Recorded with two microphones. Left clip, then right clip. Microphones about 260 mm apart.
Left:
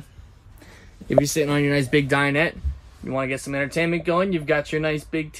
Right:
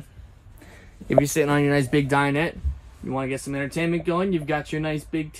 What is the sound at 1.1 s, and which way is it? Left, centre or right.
Speech, right.